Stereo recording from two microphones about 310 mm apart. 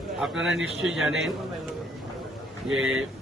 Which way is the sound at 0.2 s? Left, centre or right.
Centre.